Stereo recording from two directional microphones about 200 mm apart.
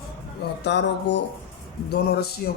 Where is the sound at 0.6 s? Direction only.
60° left (ahead or behind).